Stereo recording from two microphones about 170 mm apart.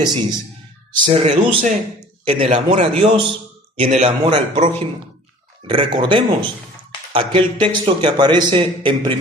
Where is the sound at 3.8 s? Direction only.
45° right (ahead or behind).